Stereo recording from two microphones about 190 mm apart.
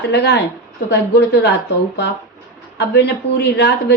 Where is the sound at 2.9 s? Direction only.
60° left (ahead or behind).